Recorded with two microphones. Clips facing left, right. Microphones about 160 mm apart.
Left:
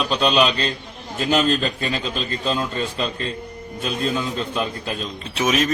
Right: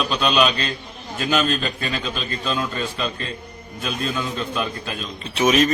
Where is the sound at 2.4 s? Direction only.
25° left (ahead or behind).